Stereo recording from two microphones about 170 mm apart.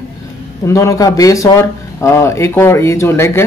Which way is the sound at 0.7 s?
15° left (ahead or behind).